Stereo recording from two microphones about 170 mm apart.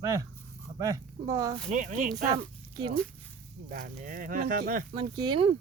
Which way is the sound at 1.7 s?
45° right (ahead or behind).